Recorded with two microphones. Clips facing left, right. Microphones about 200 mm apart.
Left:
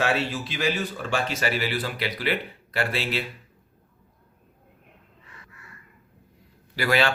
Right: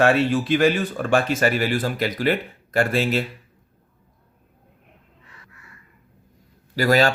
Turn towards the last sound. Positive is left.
turn(degrees=-40)  # may be behind; listen again after turning